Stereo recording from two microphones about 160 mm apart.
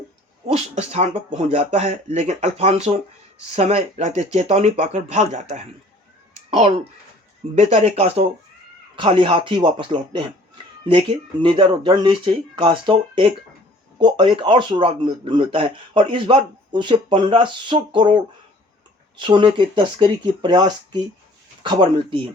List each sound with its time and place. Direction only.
0.4 s speech: 40° right (ahead or behind)